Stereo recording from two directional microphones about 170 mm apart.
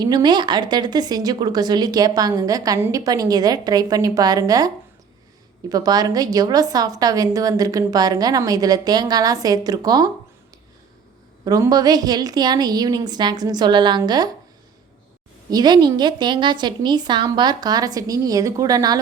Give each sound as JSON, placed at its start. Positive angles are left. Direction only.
{"t": 0.0, "sound": "a woman's voice", "side_deg": -25}
{"t": 11.4, "sound": "a woman's voice", "side_deg": -20}
{"t": 15.4, "sound": "a woman's voice", "side_deg": -25}